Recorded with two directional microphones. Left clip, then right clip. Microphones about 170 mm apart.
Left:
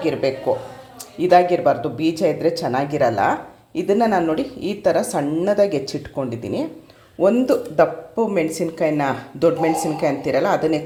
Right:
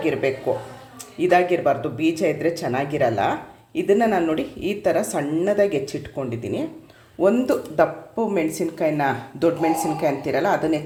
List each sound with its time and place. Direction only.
0.0 s a woman's voice: 10° left (ahead or behind)